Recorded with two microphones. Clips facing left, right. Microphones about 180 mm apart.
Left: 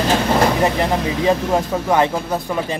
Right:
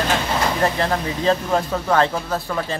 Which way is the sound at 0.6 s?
15° left (ahead or behind).